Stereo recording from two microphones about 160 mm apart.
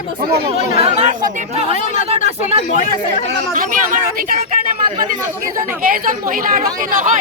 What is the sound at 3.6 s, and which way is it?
Speech, 60° right (ahead or behind).